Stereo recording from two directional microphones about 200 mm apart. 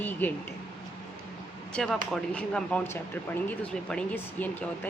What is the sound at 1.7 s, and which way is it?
Speech, centre (ahead or behind).